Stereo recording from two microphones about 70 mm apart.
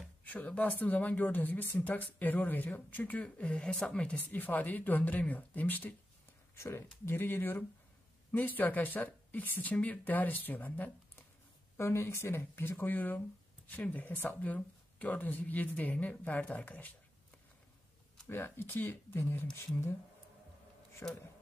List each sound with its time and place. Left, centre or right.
0.2 s speech: left
4.3 s speech: left
6.5 s speech: left
11.7 s speech: left
18.3 s speech: left
21.0 s speech: centre